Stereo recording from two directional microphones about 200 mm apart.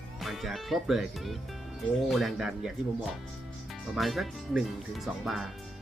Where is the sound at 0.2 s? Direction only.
Centre (ahead or behind).